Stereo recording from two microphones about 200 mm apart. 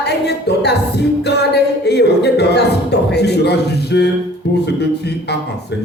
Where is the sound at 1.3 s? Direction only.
55° left (ahead or behind).